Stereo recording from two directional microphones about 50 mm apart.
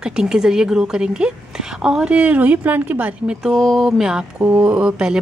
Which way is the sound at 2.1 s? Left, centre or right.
Right.